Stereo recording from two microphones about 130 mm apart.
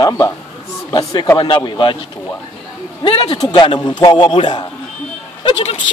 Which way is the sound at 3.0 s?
45° left (ahead or behind).